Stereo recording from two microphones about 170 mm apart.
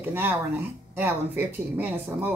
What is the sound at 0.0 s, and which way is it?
Speech, 10° right (ahead or behind).